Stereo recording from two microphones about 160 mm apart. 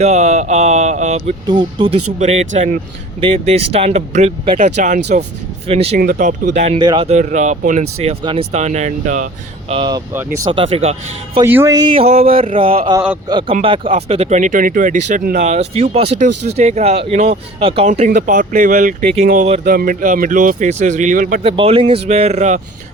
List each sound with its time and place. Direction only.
0.0 s speech: 45° right (ahead or behind)
1.5 s speech: 30° right (ahead or behind)
2.1 s speech: 40° right (ahead or behind)
5.6 s speech: 40° right (ahead or behind)
6.0 s speech: 60° right (ahead or behind)
6.7 s speech: 30° right (ahead or behind)
7.2 s speech: 50° right (ahead or behind)
8.0 s speech: 35° right (ahead or behind)
8.5 s speech: 45° right (ahead or behind)
9.7 s speech: 30° right (ahead or behind)
11.4 s speech: 15° right (ahead or behind); by 21.4 s 60° right (ahead or behind)
21.4 s speech: 35° right (ahead or behind)